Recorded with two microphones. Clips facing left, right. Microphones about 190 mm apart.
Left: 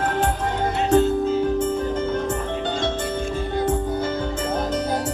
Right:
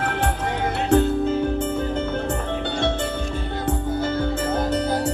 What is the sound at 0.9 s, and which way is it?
Music, 65° right (ahead or behind).